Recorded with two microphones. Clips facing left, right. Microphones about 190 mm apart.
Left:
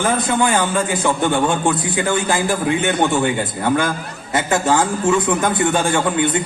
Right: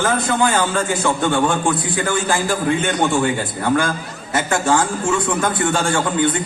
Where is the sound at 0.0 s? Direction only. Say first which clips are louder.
Even; 20° left (ahead or behind).